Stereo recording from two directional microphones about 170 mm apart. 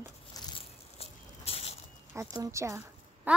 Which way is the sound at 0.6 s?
35° left (ahead or behind).